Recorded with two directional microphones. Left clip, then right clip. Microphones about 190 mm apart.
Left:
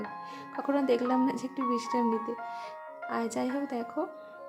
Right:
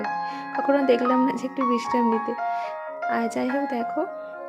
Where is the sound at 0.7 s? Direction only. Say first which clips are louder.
Right 7 dB; 15° right (ahead or behind).